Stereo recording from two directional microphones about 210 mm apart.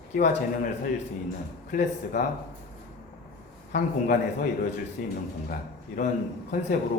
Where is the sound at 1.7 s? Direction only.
40° left (ahead or behind).